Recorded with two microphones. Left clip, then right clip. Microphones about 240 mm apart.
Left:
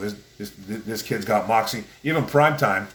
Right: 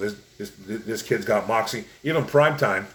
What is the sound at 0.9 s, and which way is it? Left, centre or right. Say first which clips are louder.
Speech: even; centre.